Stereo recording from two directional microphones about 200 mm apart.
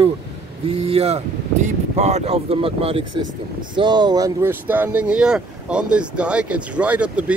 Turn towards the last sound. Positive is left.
turn(degrees=-5)  # may be behind; listen again after turning